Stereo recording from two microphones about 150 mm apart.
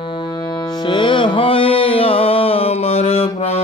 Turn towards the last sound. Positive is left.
turn(degrees=40)  # may be behind; listen again after turning